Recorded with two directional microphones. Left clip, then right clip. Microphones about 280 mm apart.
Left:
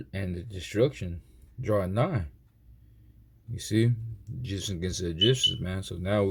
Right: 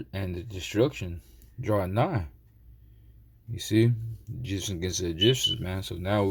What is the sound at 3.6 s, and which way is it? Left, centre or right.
Speech, centre.